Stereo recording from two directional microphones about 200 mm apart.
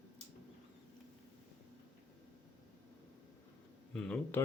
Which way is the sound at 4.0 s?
5° left (ahead or behind).